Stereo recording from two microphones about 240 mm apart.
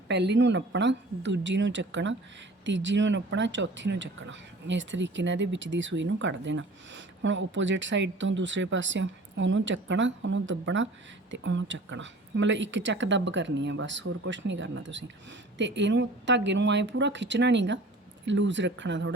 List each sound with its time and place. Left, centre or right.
0.1 s speech: right